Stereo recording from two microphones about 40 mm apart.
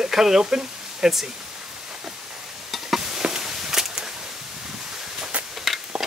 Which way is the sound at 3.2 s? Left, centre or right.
Centre.